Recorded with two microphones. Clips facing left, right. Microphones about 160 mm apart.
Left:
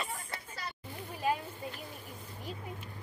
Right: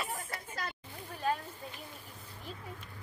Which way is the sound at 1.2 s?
10° left (ahead or behind).